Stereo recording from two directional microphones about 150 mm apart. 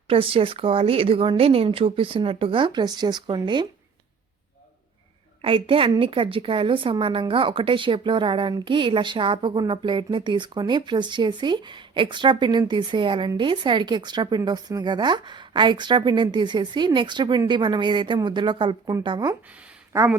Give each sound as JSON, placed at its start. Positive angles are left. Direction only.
{"t": 0.1, "sound": "a woman's voice", "side_deg": -35}
{"t": 5.4, "sound": "a woman's voice", "side_deg": -35}
{"t": 19.9, "sound": "a woman's voice", "side_deg": -20}